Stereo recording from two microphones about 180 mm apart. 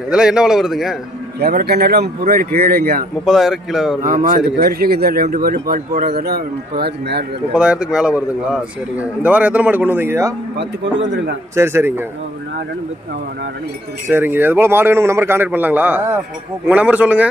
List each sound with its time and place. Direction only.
0.1 s a man's voice: 5° right (ahead or behind)
1.4 s speech: 60° right (ahead or behind)
3.3 s a man's voice: centre (ahead or behind)
4.0 s speech: 50° right (ahead or behind); by 7.2 s 65° right (ahead or behind)
7.5 s a man's voice: 5° right (ahead or behind)
10.6 s a man's voice: 85° right
11.5 s a man's voice: 15° right (ahead or behind)
14.0 s a man's voice: 10° right (ahead or behind)